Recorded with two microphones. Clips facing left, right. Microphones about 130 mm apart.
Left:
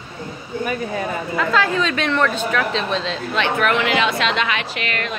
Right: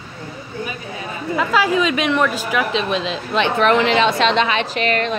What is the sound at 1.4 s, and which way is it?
Speech, 15° right (ahead or behind).